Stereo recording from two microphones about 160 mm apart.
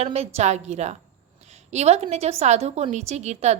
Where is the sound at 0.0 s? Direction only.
40° right (ahead or behind).